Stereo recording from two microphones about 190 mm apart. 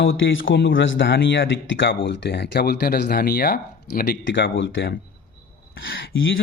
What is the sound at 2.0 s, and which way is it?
Speech, 65° left (ahead or behind).